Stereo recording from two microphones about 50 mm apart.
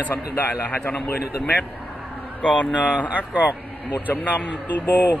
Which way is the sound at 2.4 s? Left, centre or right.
Left.